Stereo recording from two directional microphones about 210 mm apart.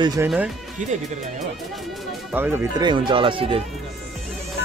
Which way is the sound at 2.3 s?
10° right (ahead or behind).